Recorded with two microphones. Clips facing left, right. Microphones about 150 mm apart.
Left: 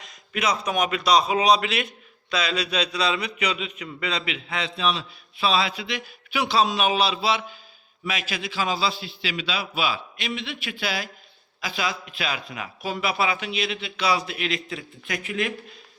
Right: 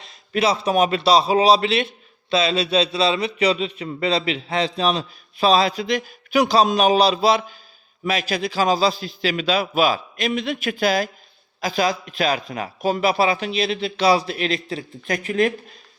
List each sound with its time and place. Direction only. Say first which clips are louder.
0.0 s a man's voice: right 6 dB; 30° right (ahead or behind)